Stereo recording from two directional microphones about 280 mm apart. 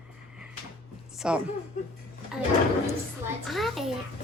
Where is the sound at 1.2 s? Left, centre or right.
Centre.